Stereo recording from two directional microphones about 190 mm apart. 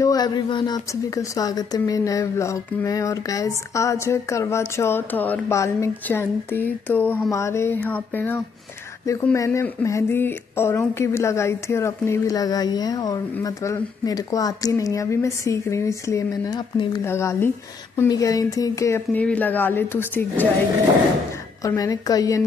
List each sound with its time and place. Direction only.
0.0 s speech: 20° left (ahead or behind)
21.6 s a woman's voice: 20° left (ahead or behind)